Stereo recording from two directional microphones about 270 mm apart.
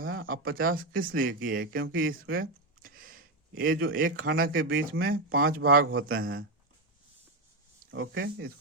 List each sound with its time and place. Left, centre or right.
0.0 s speech: right
5.9 s a man's voice: right
7.9 s speech: right